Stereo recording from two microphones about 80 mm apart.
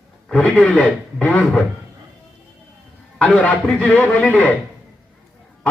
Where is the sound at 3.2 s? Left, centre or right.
Centre.